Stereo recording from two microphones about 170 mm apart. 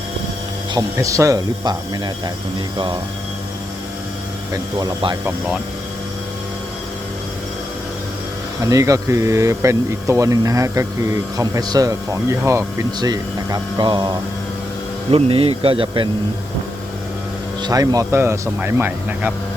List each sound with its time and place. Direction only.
0.7 s speech: 20° right (ahead or behind)
4.8 s speech: 25° right (ahead or behind)
8.6 s speech: 20° right (ahead or behind)
17.6 s speech: 20° right (ahead or behind)